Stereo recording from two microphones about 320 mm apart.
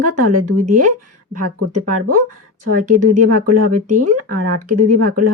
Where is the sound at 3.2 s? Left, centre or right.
Right.